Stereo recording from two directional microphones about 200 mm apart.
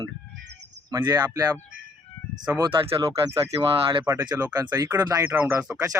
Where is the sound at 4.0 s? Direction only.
10° right (ahead or behind).